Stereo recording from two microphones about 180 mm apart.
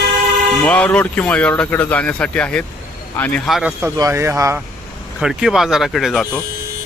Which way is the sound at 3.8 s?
15° right (ahead or behind).